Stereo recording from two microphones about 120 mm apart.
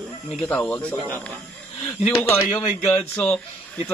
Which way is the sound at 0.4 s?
5° left (ahead or behind).